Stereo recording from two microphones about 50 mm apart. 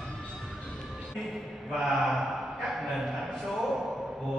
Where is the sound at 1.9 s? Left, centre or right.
Centre.